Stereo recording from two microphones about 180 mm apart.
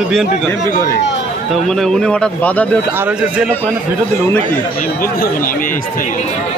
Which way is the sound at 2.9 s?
10° right (ahead or behind).